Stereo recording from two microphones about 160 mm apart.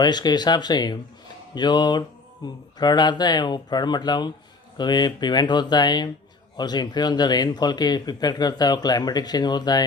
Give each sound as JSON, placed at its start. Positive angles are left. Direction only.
{"t": 0.0, "sound": "speech", "side_deg": 25}